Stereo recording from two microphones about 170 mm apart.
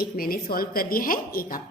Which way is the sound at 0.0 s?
60° left (ahead or behind).